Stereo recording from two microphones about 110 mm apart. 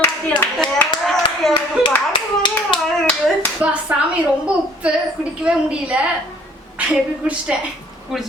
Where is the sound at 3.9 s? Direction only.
15° right (ahead or behind).